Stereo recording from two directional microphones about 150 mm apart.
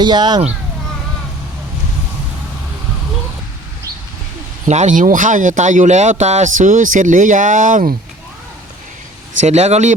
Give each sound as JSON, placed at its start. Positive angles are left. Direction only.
{"t": 0.0, "sound": "speech", "side_deg": -30}
{"t": 4.7, "sound": "speech", "side_deg": -55}
{"t": 9.4, "sound": "speech", "side_deg": -50}